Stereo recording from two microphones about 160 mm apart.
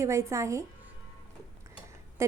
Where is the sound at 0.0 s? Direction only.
20° right (ahead or behind).